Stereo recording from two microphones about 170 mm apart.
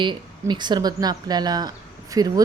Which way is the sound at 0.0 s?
25° right (ahead or behind).